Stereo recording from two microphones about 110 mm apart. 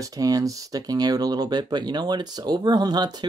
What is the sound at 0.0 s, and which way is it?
Speech, 35° right (ahead or behind).